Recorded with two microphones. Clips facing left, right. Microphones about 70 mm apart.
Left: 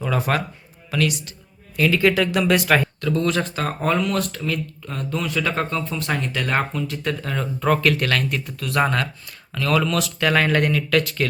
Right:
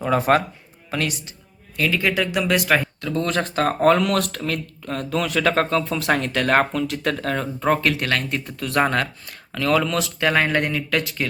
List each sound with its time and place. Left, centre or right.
0.0 s speech: right
1.7 s speech: centre
3.0 s speech: right
3.2 s speech: right
7.6 s speech: right
8.4 s speech: right; by 11.3 s centre